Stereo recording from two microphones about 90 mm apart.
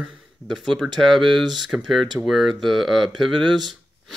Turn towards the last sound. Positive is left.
turn(degrees=0)  # may be behind; listen again after turning